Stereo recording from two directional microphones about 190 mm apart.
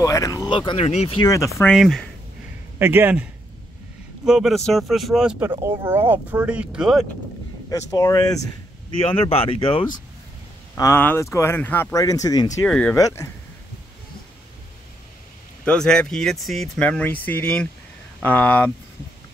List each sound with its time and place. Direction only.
0.0 s speech: 15° left (ahead or behind)
1.3 s speech: 15° left (ahead or behind)
1.7 s speech: centre (ahead or behind)
2.8 s speech: 10° right (ahead or behind)
4.3 s speech: centre (ahead or behind)
5.5 s speech: 15° right (ahead or behind)
7.7 s speech: 20° left (ahead or behind)
9.0 s speech: 30° left (ahead or behind)
10.7 s speech: 15° left (ahead or behind)
12.6 s speech: 5° left (ahead or behind)
12.9 s speech: 15° left (ahead or behind)
15.6 s speech: 5° left (ahead or behind)